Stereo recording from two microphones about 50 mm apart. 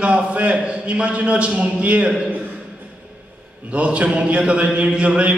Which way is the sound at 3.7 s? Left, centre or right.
Right.